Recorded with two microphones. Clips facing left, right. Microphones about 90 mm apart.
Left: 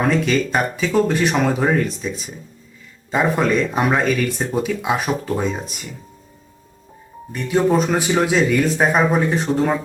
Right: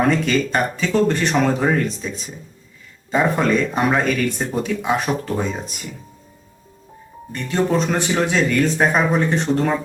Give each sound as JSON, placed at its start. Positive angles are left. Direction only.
{"t": 0.0, "sound": "speech", "side_deg": 0}
{"t": 7.3, "sound": "speech", "side_deg": 10}